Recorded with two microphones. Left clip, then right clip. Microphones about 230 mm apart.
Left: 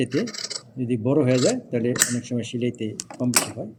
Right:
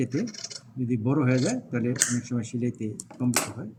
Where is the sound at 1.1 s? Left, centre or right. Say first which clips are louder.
Left 7 dB; left.